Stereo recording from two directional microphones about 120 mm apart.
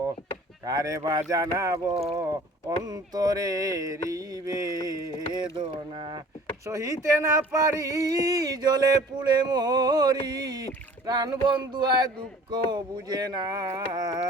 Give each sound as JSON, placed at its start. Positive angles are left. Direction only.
{"t": 0.6, "sound": "mantra", "side_deg": -30}
{"t": 1.9, "sound": "speech", "side_deg": -55}
{"t": 2.6, "sound": "mantra", "side_deg": -35}
{"t": 5.3, "sound": "speech", "side_deg": -45}
{"t": 6.7, "sound": "speech", "side_deg": -25}